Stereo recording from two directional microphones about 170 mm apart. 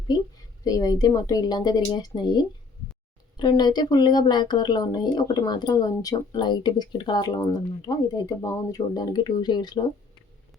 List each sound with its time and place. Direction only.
0.6 s speech: 20° left (ahead or behind)